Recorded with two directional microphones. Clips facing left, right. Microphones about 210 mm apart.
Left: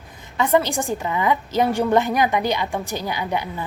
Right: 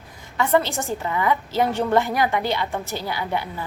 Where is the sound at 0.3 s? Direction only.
15° left (ahead or behind).